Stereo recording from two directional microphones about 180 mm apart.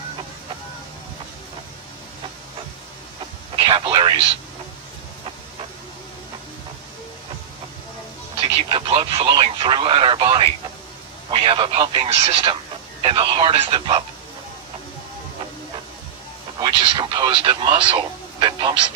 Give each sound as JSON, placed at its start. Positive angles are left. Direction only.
{"t": 3.6, "sound": "speech", "side_deg": -25}
{"t": 8.4, "sound": "radio", "side_deg": -30}
{"t": 11.3, "sound": "speech", "side_deg": -25}
{"t": 16.6, "sound": "speech", "side_deg": -25}